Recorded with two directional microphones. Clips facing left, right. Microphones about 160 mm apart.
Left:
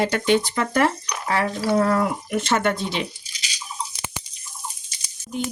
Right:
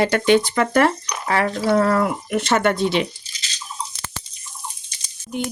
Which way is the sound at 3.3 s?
10° left (ahead or behind).